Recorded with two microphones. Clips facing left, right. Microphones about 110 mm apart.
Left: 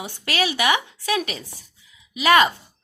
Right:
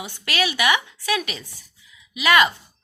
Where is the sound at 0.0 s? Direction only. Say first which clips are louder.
Left 1 dB; 35° left (ahead or behind).